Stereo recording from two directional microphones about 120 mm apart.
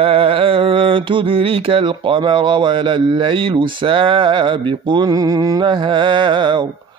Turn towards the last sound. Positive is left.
turn(degrees=-40)  # may be behind; listen again after turning